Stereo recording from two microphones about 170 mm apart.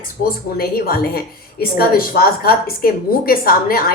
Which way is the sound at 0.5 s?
60° left (ahead or behind).